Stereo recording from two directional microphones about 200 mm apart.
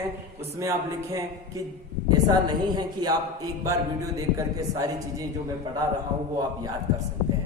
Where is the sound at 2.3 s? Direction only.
20° right (ahead or behind).